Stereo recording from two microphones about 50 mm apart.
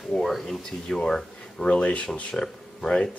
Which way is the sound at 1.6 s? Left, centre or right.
Left.